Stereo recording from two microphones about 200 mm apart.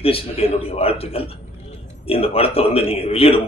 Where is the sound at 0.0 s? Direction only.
30° left (ahead or behind).